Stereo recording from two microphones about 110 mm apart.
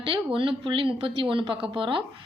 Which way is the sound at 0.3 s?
50° right (ahead or behind).